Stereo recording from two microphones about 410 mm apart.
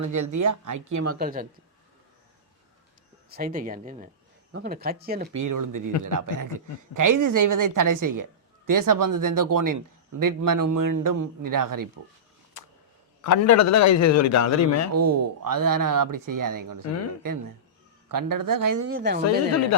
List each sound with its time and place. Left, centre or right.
0.0 s a woman's voice: right
1.2 s speech: centre
3.2 s speech: right
5.3 s a woman's voice: right
13.2 s a man's voice: left
14.9 s a woman's voice: right
18.9 s speech: right
19.2 s a man's voice: left